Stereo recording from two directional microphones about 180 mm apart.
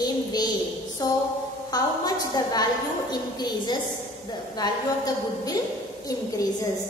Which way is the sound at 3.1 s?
25° left (ahead or behind).